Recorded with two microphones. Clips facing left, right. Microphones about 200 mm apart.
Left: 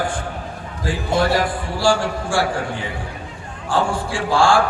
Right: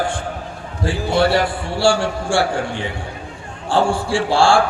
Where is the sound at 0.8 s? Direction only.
30° right (ahead or behind).